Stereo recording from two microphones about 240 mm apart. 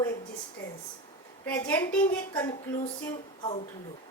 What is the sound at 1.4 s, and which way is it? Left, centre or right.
A woman's voice, centre.